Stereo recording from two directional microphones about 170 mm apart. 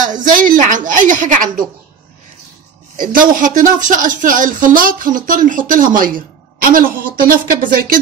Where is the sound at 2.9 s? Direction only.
55° right (ahead or behind).